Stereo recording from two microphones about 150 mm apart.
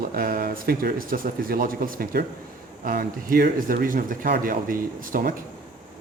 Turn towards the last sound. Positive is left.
turn(degrees=-70)  # may be behind; listen again after turning